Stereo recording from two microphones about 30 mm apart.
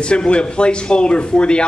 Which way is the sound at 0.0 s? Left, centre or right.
Left.